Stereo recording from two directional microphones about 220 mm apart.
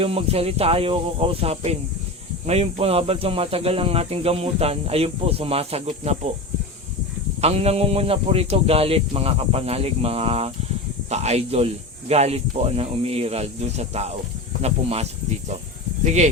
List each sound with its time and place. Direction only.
0.0 s speech: 25° right (ahead or behind)
7.4 s speech: 30° right (ahead or behind)